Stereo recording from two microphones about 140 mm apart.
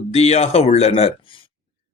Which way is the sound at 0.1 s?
50° left (ahead or behind).